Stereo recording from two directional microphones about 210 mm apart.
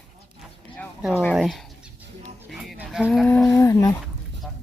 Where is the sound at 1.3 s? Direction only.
Centre (ahead or behind).